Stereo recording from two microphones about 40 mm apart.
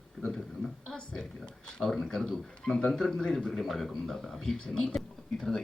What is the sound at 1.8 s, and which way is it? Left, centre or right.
A man's voice, centre.